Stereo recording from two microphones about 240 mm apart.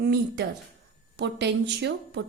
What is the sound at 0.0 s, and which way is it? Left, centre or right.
A woman's voice, right.